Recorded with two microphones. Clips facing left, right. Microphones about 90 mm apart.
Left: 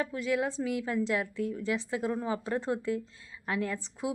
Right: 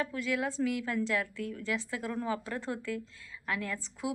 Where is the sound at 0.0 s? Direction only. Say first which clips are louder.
Left 2 dB; 25° left (ahead or behind).